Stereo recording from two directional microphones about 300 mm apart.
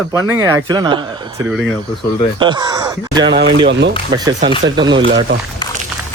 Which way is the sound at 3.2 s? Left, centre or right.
Right.